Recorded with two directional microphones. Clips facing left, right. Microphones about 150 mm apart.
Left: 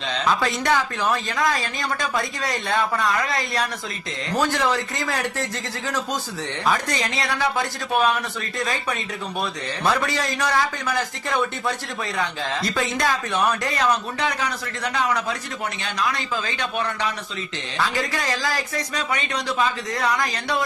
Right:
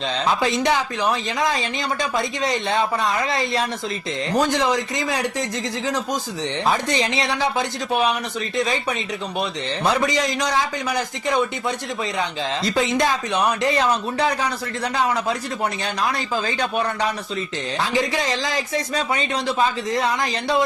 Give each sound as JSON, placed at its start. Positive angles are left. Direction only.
{"t": 0.3, "sound": "a man's voice", "side_deg": -20}
{"t": 17.7, "sound": "speech", "side_deg": -20}